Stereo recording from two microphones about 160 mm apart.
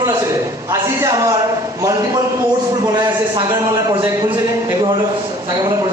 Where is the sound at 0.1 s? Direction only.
20° right (ahead or behind).